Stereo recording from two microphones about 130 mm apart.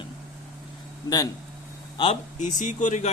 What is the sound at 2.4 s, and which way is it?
Speech, 75° left (ahead or behind).